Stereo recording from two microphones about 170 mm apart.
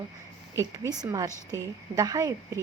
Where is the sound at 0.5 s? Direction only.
20° right (ahead or behind).